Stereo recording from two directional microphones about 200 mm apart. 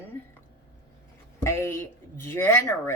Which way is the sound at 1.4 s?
15° left (ahead or behind).